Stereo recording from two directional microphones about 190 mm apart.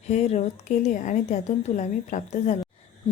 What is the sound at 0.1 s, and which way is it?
A woman's voice, 35° left (ahead or behind).